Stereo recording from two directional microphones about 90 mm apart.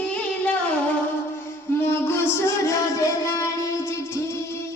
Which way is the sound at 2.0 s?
30° left (ahead or behind).